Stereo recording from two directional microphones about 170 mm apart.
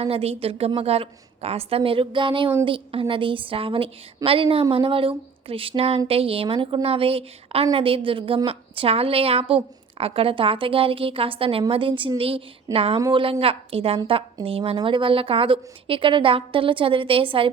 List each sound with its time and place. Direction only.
0.0 s a woman's voice: 35° right (ahead or behind)
13.0 s a woman's voice: 20° right (ahead or behind)
13.4 s a woman's voice: 35° right (ahead or behind)